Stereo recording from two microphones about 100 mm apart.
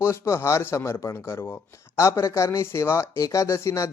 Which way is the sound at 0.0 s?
25° left (ahead or behind).